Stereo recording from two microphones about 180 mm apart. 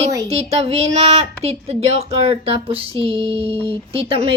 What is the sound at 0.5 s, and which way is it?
Speech, 35° right (ahead or behind).